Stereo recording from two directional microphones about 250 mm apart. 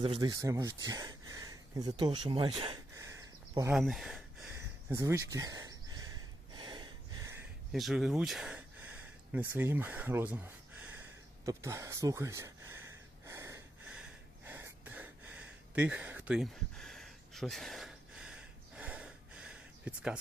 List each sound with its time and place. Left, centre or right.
0.0 s speech: centre
3.8 s speech: centre
6.5 s a sound: centre
7.7 s speech: centre
13.2 s wheeze: centre